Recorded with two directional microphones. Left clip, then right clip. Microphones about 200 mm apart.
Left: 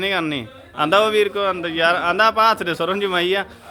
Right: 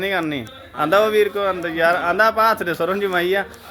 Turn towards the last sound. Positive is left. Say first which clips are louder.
# even
turn(degrees=5)  # may be behind; listen again after turning